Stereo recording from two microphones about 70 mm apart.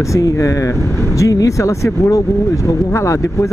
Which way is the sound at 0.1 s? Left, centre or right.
Left.